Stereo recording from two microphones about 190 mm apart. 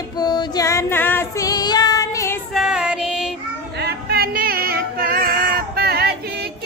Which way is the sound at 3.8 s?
60° right (ahead or behind).